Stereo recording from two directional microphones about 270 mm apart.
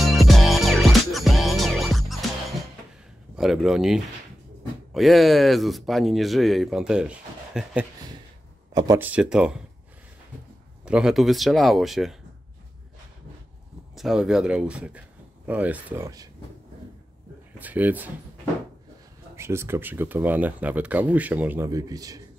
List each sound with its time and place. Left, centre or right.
0.0 s music: centre
3.3 s speech: centre
10.9 s speech: centre
13.9 s speech: centre
17.6 s speech: centre
19.3 s speech: centre